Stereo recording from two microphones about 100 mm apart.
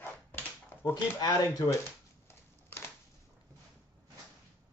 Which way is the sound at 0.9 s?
40° left (ahead or behind).